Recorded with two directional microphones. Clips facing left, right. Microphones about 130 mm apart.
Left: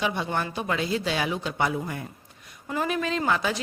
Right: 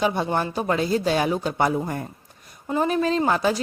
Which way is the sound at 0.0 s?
40° right (ahead or behind).